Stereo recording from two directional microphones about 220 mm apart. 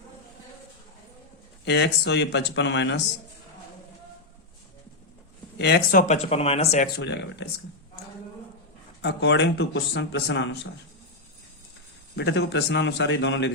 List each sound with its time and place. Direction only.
1.6 s a man's voice: 50° left (ahead or behind)
5.5 s speech: 45° left (ahead or behind); by 6.8 s 30° left (ahead or behind)
6.8 s a man's voice: 50° left (ahead or behind)
9.0 s a man's voice: 50° left (ahead or behind)
12.1 s a man's voice: 50° left (ahead or behind)